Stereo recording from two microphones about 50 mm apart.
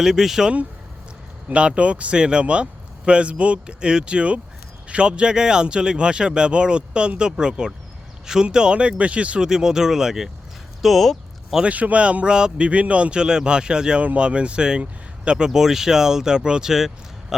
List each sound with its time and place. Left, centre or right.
0.0 s speech: centre
1.5 s speech: right
9.5 s speech: centre
10.8 s speech: centre
11.6 s speech: right; by 17.3 s centre